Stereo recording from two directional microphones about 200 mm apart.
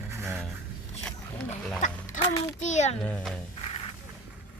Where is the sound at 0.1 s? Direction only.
10° right (ahead or behind).